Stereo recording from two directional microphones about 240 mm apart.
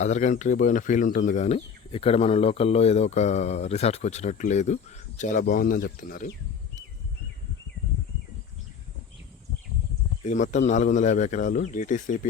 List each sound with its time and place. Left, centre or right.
0.0 s speech: left
10.2 s speech: left